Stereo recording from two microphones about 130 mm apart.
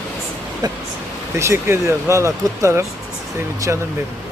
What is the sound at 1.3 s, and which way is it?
Speech, 20° right (ahead or behind).